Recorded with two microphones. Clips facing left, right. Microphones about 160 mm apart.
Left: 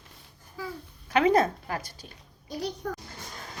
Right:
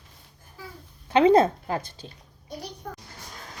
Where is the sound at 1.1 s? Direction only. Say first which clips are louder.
Right 5 dB; 30° right (ahead or behind).